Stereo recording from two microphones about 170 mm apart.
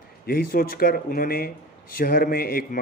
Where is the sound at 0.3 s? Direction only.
60° left (ahead or behind).